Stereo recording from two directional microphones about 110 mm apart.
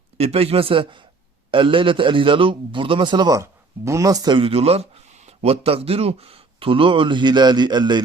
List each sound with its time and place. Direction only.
0.2 s a man's voice: 65° right (ahead or behind); by 3.4 s 40° right (ahead or behind)
3.4 s speech: 25° right (ahead or behind)
4.4 s speech: 65° right (ahead or behind); by 8.0 s 40° right (ahead or behind)